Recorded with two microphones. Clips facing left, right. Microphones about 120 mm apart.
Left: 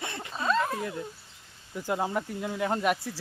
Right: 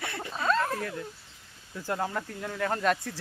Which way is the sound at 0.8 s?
15° left (ahead or behind).